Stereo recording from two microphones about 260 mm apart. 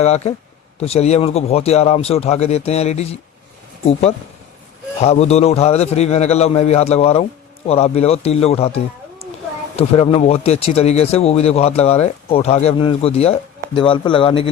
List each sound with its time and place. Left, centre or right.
0.0 s speech: left
4.9 s speech: left